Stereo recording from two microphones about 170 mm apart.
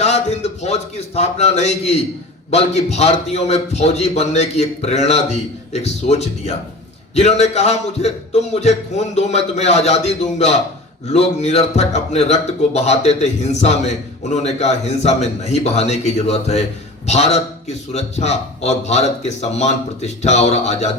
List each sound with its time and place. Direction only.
0.0 s a man's voice: 40° left (ahead or behind)